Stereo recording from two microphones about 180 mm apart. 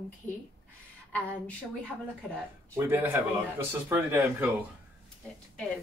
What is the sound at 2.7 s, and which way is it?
Speech, 10° right (ahead or behind).